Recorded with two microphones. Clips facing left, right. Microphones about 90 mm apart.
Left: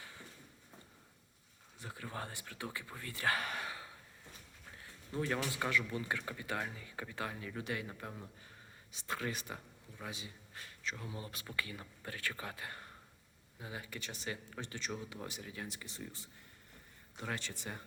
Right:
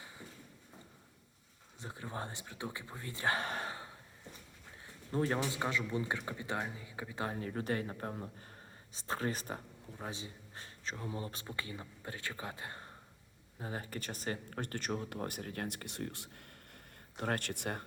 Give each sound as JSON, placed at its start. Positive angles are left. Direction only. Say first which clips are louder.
{"t": 1.8, "sound": "speech", "louder": "right 2 dB", "side_deg": -25}
{"t": 5.1, "sound": "speech", "louder": "right 4 dB", "side_deg": -35}
{"t": 5.4, "sound": "speech", "louder": "right 1 dB", "side_deg": -20}
{"t": 7.2, "sound": "speech", "louder": "right 5 dB", "side_deg": -35}
{"t": 13.6, "sound": "speech", "louder": "right 4 dB", "side_deg": -40}